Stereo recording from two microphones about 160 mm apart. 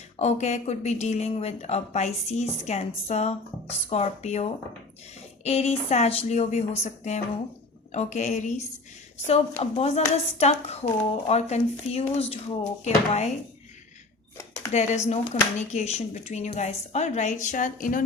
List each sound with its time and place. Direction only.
0.2 s speech: 45° left (ahead or behind)
14.7 s speech: 45° left (ahead or behind)